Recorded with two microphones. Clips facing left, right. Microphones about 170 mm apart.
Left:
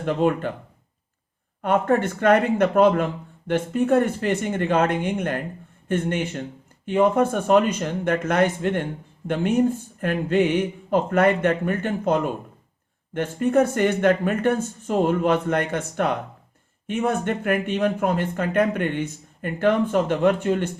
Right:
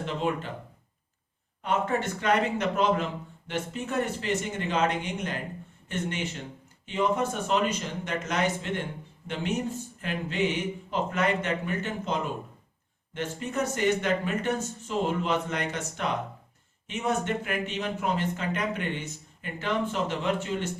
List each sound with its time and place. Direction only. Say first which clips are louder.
0.0 s speech: left 8 dB; 50° left (ahead or behind)
1.6 s speech: left 7 dB; 55° left (ahead or behind)